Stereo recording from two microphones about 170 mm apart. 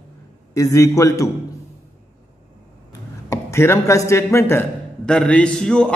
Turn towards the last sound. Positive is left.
turn(degrees=5)  # may be behind; listen again after turning